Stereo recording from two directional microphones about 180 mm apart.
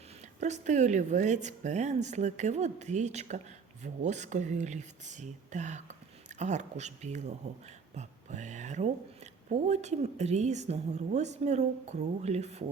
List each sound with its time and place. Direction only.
0.3 s speech: 40° right (ahead or behind)